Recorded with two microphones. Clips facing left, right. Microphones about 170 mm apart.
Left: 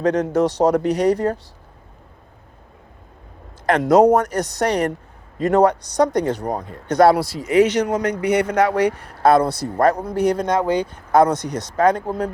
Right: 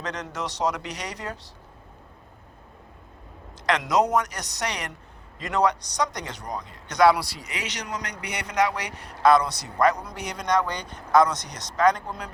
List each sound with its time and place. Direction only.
0.0 s speech: 55° left (ahead or behind)
3.7 s speech: 55° left (ahead or behind)
10.7 s speech: 5° left (ahead or behind)
11.1 s speech: 55° left (ahead or behind)